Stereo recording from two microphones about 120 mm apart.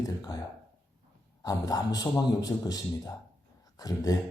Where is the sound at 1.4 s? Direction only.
30° left (ahead or behind).